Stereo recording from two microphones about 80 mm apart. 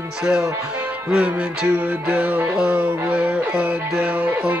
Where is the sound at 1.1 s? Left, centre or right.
Centre.